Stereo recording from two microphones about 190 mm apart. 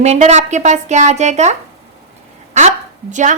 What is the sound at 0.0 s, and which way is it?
A woman's voice, 35° right (ahead or behind).